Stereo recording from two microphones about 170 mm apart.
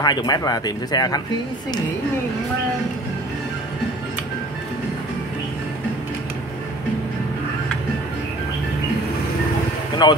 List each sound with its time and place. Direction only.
0.0 s speech: 25° left (ahead or behind)
10.0 s speech: 25° left (ahead or behind)